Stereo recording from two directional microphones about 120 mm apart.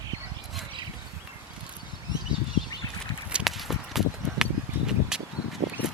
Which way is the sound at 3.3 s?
5° right (ahead or behind).